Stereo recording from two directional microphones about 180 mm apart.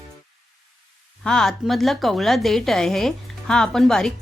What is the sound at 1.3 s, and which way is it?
A woman's voice, 5° left (ahead or behind).